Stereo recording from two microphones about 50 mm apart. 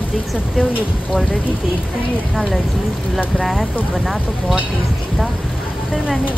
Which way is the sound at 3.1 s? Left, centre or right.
Centre.